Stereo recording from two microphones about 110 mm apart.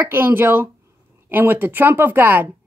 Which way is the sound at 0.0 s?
20° right (ahead or behind).